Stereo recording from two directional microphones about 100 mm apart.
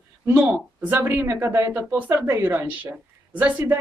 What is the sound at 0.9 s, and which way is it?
A woman's voice, 20° right (ahead or behind).